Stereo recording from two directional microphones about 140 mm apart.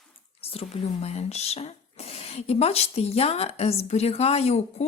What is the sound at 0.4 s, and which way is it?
Speech, 45° left (ahead or behind).